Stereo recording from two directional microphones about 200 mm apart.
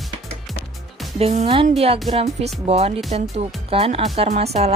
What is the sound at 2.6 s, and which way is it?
Speech, 30° right (ahead or behind).